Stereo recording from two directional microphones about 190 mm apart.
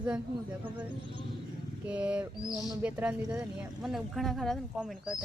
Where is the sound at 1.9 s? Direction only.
5° right (ahead or behind).